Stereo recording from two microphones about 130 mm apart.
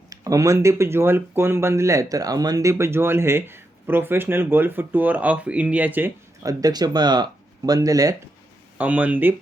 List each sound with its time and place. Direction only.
0.1 s speech: 25° right (ahead or behind)
6.4 s speech: 25° right (ahead or behind)
8.8 s speech: 10° right (ahead or behind)